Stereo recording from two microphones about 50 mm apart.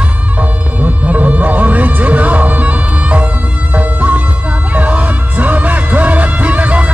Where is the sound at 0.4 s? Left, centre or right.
Right.